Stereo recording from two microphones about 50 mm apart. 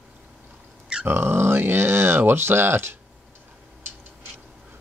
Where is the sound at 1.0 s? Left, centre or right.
Right.